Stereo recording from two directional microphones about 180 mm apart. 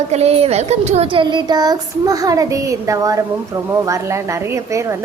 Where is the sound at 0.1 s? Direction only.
35° right (ahead or behind).